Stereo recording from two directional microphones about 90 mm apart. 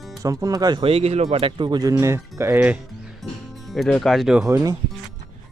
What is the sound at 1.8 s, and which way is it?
Speech, 35° right (ahead or behind).